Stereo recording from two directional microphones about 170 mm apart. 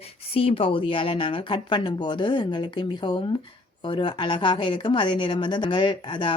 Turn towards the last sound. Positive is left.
turn(degrees=30)  # may be behind; listen again after turning